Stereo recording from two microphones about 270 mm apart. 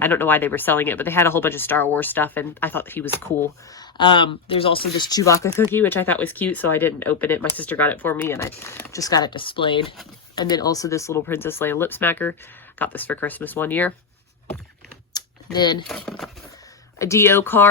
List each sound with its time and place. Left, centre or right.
0.0 s speech: centre
15.1 s typing: centre
15.5 s speech: centre
15.9 s speech: centre